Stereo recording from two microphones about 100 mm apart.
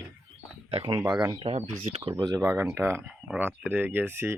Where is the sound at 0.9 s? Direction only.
35° right (ahead or behind).